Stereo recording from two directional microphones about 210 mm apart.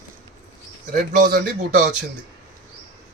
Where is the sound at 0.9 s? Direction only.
40° right (ahead or behind).